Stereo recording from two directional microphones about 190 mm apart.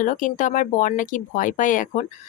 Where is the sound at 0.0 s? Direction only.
45° left (ahead or behind).